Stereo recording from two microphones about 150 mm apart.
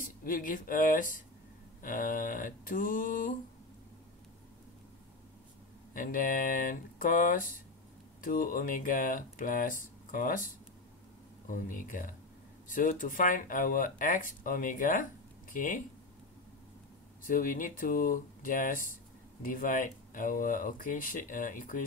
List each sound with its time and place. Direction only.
0.0 s speech: 65° left (ahead or behind)
5.9 s speech: 65° left (ahead or behind)
11.4 s speech: 65° left (ahead or behind)
17.2 s speech: 65° left (ahead or behind)